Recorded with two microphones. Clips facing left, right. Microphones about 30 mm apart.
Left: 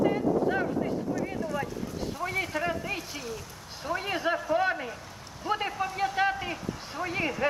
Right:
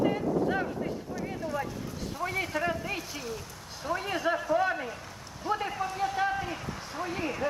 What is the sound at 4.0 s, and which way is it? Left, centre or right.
A man's voice, centre.